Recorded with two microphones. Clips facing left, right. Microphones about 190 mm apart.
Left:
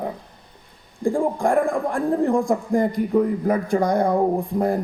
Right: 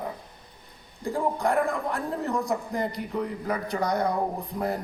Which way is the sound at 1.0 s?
50° left (ahead or behind).